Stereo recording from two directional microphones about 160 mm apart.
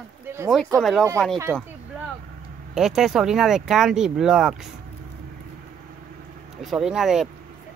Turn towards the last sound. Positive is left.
turn(degrees=-5)  # may be behind; listen again after turning